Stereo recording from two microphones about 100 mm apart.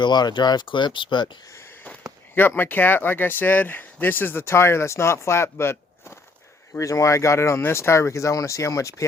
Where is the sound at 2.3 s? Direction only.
20° left (ahead or behind).